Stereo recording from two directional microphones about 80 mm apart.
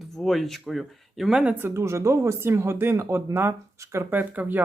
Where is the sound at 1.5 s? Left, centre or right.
Right.